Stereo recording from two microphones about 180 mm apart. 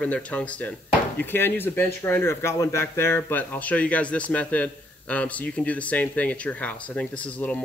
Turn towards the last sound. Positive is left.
turn(degrees=5)  # may be behind; listen again after turning